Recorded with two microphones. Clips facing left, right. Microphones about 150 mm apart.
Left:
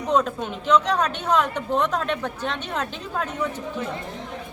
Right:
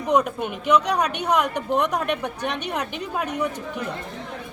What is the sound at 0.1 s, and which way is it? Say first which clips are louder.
Speech: right 1 dB; 10° right (ahead or behind).